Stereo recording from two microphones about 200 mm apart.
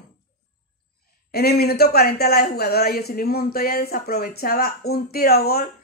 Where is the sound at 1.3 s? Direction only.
50° left (ahead or behind).